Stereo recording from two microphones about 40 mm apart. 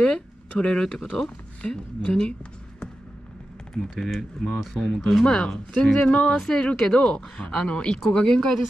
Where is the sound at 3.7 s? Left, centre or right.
Centre.